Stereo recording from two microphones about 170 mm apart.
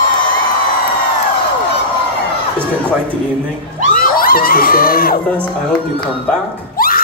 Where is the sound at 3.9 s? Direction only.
60° left (ahead or behind).